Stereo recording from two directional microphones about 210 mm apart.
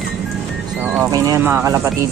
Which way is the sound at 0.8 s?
10° right (ahead or behind).